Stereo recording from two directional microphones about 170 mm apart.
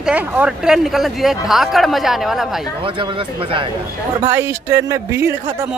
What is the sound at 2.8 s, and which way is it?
Speech, 30° right (ahead or behind).